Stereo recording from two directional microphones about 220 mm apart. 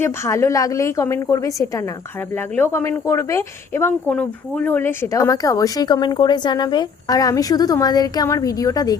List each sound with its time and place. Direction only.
0.0 s speech: 15° left (ahead or behind)